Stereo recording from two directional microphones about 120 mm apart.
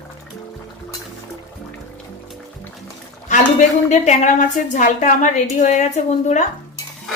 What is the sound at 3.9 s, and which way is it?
A woman's voice, 85° left.